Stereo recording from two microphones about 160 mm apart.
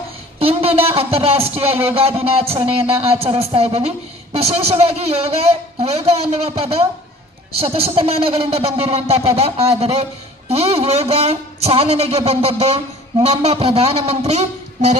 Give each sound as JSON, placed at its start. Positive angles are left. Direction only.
{"t": 0.3, "sound": "speech", "side_deg": -40}